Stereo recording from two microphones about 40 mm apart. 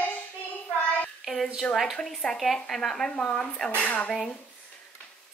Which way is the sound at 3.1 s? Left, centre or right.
Left.